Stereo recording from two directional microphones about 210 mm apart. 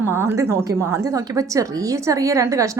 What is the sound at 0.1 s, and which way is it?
A woman's voice, 10° right (ahead or behind).